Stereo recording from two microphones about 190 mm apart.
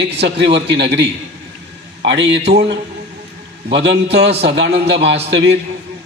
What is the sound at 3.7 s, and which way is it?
A man's voice, 65° right (ahead or behind).